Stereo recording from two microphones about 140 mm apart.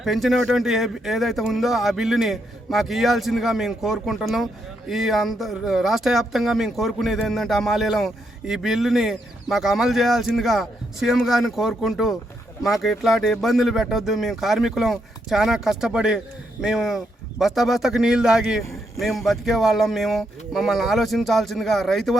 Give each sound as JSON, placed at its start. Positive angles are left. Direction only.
{"t": 0.0, "sound": "speech", "side_deg": 0}